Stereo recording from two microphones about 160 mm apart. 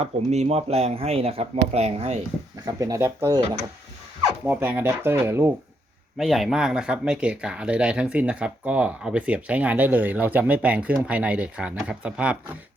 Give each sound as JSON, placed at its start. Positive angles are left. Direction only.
{"t": 0.0, "sound": "speech", "side_deg": -40}
{"t": 2.6, "sound": "speech", "side_deg": -20}
{"t": 6.1, "sound": "speech", "side_deg": 0}